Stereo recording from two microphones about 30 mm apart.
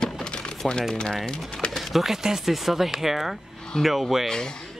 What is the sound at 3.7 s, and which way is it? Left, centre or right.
Speech, left.